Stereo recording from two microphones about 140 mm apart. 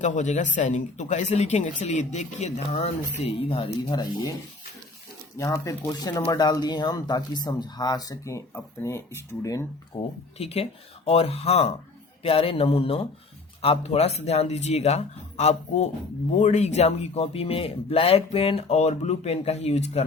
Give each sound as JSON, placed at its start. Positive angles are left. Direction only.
{"t": 0.0, "sound": "speech", "side_deg": 60}
{"t": 3.9, "sound": "speech", "side_deg": 30}
{"t": 5.4, "sound": "speech", "side_deg": 20}
{"t": 9.9, "sound": "speech", "side_deg": 40}